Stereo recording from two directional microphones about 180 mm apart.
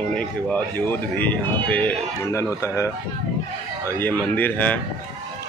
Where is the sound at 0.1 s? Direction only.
10° left (ahead or behind).